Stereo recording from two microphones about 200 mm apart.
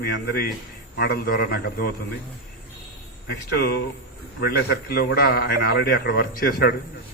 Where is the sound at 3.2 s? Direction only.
50° left (ahead or behind).